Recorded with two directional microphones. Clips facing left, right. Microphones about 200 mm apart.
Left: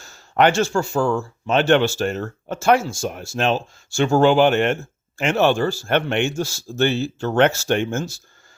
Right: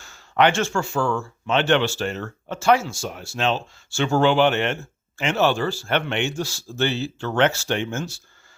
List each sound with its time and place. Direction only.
0.0 s speech: 40° left (ahead or behind)